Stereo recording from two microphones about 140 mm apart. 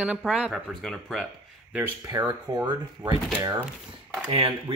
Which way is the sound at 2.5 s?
30° right (ahead or behind).